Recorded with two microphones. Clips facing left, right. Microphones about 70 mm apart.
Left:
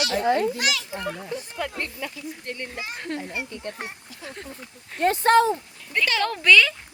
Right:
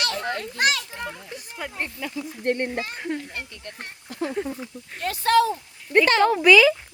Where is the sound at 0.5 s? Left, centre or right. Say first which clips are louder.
Right 3 dB; right.